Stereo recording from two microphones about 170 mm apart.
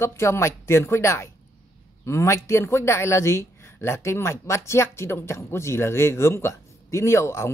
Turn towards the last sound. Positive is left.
turn(degrees=15)  # may be behind; listen again after turning